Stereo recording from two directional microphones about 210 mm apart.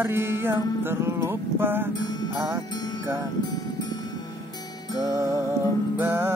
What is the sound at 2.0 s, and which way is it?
Music, 20° left (ahead or behind).